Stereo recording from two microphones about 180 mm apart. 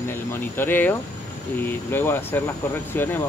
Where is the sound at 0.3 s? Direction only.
10° left (ahead or behind).